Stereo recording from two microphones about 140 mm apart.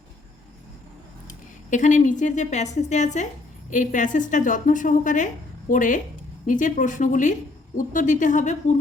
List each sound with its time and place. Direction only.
1.7 s a woman's voice: 60° left (ahead or behind)